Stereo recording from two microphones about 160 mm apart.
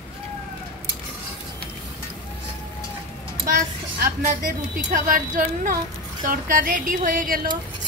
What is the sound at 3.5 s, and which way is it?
Speech, 60° right (ahead or behind).